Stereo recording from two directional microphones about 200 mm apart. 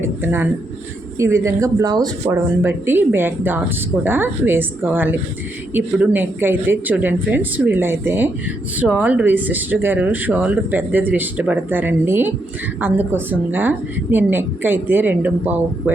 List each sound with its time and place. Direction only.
0.0 s speech: 10° right (ahead or behind)